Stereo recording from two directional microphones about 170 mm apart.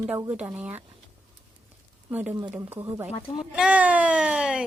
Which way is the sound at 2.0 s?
10° right (ahead or behind).